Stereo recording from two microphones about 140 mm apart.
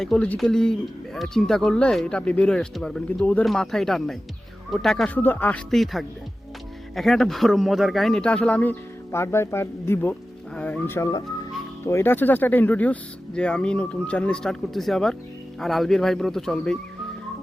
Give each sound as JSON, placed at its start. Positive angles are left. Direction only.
{"t": 0.0, "sound": "speech", "side_deg": 5}
{"t": 5.7, "sound": "speech", "side_deg": 0}